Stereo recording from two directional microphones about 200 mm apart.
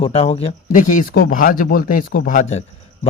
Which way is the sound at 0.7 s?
40° left (ahead or behind).